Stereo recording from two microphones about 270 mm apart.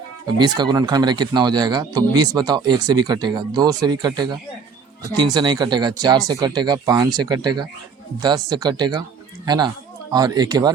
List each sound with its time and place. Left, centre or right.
0.3 s speech: centre